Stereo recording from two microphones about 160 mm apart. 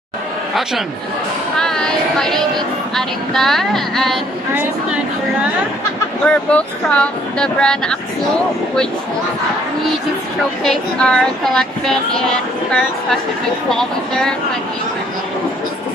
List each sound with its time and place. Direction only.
1.6 s speech: 5° left (ahead or behind)
6.2 s speech: 5° left (ahead or behind)
10.6 s speech: 5° left (ahead or behind)
13.7 s speech: 5° left (ahead or behind)